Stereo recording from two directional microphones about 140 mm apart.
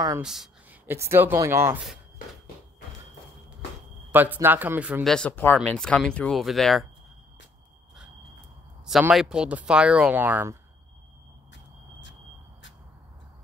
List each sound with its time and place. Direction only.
0.2 s a sound: 5° right (ahead or behind)
0.8 s speech: 20° right (ahead or behind)
4.1 s speech: 15° right (ahead or behind)
5.0 s speech: 5° left (ahead or behind)
9.1 s speech: 5° right (ahead or behind)